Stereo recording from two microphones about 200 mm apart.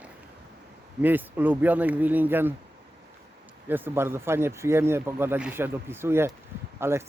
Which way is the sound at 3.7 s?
10° right (ahead or behind).